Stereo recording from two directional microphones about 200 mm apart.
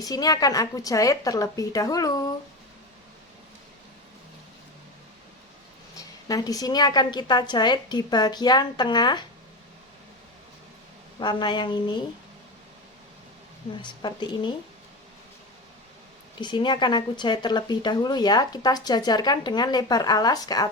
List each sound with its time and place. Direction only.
0.0 s speech: 20° left (ahead or behind)
6.2 s speech: 15° left (ahead or behind)
11.2 s speech: 20° left (ahead or behind)
13.8 s speech: 20° left (ahead or behind)
16.4 s speech: 25° left (ahead or behind)